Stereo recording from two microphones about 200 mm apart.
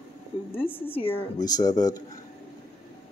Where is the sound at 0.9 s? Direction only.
30° left (ahead or behind).